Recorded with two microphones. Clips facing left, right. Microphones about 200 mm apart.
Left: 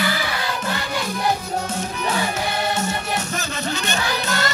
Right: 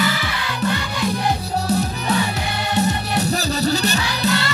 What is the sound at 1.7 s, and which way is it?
Music, 40° right (ahead or behind).